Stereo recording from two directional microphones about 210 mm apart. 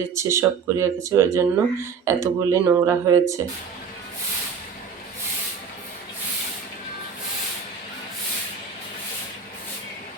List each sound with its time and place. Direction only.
0.1 s speech: 15° right (ahead or behind)